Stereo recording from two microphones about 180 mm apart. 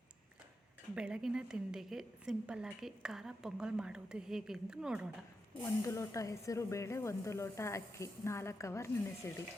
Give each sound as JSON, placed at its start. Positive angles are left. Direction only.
{"t": 0.9, "sound": "a woman's voice", "side_deg": -5}
{"t": 5.8, "sound": "speech", "side_deg": 15}